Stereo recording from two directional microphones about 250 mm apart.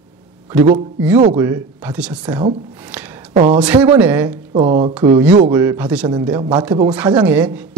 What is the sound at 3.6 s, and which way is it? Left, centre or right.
Speech, centre.